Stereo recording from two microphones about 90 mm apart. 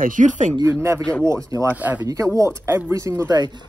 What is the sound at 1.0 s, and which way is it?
Speech, 10° left (ahead or behind).